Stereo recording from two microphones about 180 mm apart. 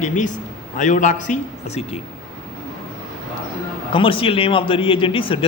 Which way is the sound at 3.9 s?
30° left (ahead or behind).